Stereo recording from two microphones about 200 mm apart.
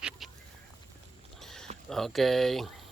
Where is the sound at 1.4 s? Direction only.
Centre (ahead or behind).